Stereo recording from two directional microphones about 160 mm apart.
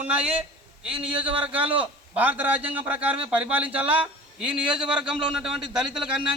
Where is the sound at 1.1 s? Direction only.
30° right (ahead or behind).